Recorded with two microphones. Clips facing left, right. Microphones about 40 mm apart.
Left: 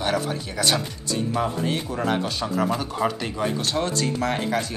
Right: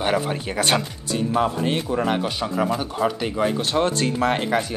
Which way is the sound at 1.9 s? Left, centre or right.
Centre.